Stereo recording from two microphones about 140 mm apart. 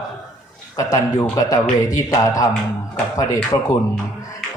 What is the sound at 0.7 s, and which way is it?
Speech, 25° left (ahead or behind).